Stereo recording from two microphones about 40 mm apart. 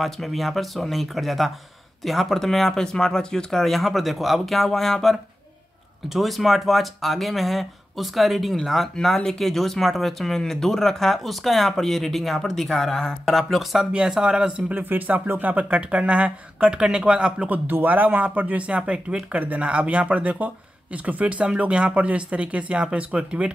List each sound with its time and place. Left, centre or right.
0.0 s speech: centre
3.6 s speech: centre
4.6 s speech: centre
6.0 s speech: centre
9.0 s speech: centre
14.0 s speech: centre
14.8 s speech: right
15.7 s speech: right
17.8 s speech: right
18.8 s speech: right